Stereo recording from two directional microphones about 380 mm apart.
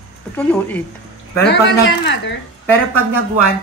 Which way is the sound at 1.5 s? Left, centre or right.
Left.